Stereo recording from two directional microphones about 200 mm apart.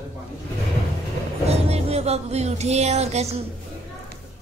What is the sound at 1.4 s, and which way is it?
Speech, 30° right (ahead or behind).